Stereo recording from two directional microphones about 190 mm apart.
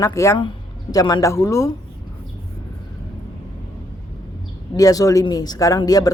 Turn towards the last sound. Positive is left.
turn(degrees=20)  # may be behind; listen again after turning